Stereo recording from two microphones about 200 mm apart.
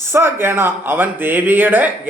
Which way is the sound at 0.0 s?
10° right (ahead or behind).